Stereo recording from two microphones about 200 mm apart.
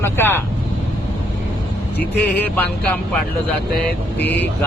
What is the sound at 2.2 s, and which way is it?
Speech, 10° left (ahead or behind).